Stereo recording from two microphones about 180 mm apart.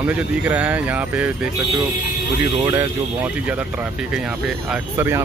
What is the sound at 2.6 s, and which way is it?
Speech, 20° right (ahead or behind).